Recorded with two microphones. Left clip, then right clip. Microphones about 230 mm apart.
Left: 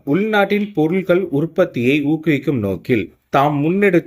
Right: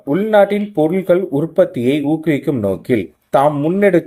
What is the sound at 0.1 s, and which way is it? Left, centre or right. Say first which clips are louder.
Speech: right 4 dB; centre.